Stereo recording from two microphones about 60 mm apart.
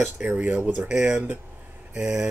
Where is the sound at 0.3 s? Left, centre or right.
Right.